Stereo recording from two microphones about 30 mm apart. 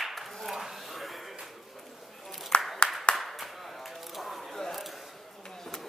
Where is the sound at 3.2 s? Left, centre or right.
Centre.